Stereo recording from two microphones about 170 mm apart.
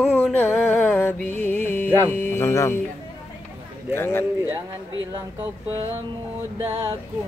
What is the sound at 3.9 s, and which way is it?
Speech, 15° left (ahead or behind).